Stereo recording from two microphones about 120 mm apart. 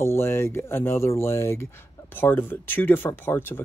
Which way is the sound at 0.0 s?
20° left (ahead or behind).